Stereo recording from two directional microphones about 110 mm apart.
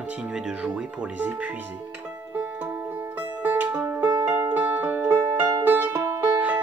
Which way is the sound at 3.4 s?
15° right (ahead or behind).